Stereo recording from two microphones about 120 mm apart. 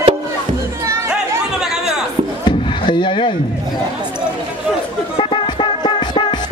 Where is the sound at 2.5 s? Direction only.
40° left (ahead or behind).